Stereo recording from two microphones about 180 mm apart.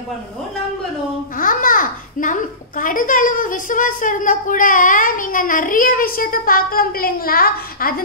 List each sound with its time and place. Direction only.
1.3 s a child's voice: 50° left (ahead or behind)